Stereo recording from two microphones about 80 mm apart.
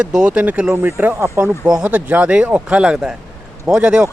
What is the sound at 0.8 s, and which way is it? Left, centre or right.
Speech, right.